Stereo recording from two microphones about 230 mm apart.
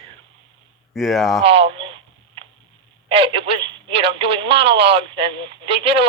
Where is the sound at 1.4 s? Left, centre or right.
Right.